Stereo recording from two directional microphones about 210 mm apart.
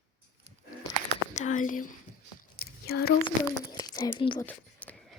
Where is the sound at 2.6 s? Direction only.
50° left (ahead or behind).